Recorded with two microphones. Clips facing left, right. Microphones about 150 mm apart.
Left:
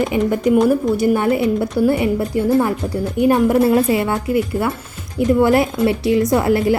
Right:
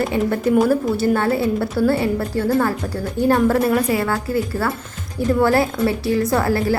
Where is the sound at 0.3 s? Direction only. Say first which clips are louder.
Left 2 dB; 15° left (ahead or behind).